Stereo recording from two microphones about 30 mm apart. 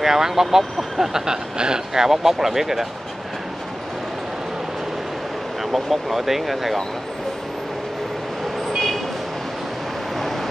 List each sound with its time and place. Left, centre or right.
0.0 s speech: centre
1.1 s speech: right
2.0 s speech: centre
5.7 s speech: centre